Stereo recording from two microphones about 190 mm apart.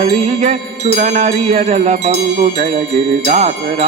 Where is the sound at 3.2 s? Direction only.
35° right (ahead or behind).